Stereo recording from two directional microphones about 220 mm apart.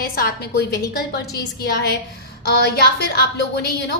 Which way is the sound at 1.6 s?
45° left (ahead or behind).